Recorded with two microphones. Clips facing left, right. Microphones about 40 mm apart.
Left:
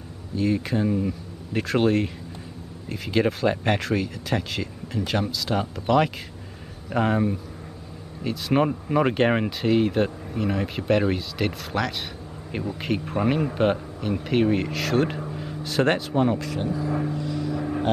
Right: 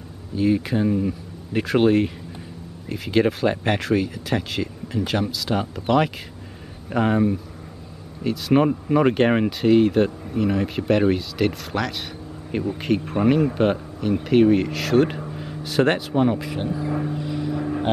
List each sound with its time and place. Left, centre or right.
0.4 s speech: centre
17.1 s vehicle: centre